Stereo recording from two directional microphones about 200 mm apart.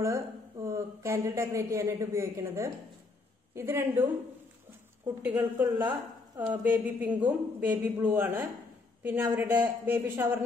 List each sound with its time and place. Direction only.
0.7 s a man's voice: 15° right (ahead or behind)